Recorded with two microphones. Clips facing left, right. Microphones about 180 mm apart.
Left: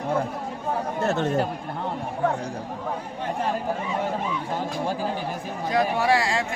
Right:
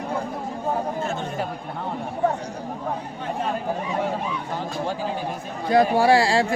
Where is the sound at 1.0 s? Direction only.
70° left (ahead or behind).